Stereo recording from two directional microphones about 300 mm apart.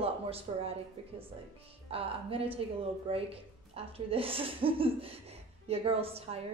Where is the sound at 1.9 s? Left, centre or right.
Centre.